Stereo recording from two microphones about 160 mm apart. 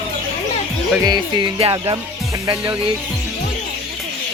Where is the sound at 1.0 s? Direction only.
25° right (ahead or behind).